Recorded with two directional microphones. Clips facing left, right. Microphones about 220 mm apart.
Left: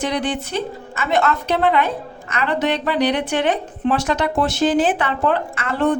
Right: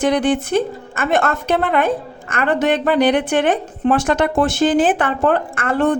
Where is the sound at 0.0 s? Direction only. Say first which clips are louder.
Right 6 dB; 50° right (ahead or behind).